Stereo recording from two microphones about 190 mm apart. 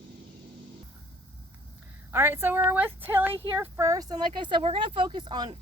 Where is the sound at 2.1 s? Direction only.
10° right (ahead or behind).